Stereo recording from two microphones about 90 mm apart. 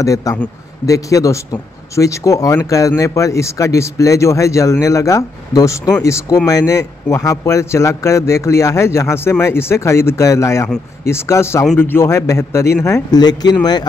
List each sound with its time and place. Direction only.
0.0 s a man's voice: 40° left (ahead or behind)
13.2 s speech: 50° left (ahead or behind)